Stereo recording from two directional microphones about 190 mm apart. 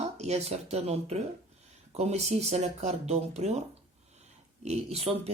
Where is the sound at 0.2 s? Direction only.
35° right (ahead or behind).